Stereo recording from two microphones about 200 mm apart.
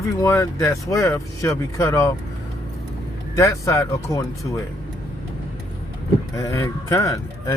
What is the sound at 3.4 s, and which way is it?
Speech, 15° left (ahead or behind).